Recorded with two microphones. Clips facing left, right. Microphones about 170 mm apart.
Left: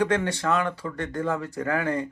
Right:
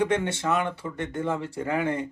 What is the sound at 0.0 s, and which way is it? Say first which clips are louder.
Speech: left 1 dB; 25° right (ahead or behind).